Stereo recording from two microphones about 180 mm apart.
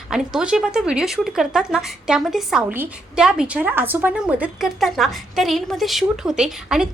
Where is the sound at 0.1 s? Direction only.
5° right (ahead or behind).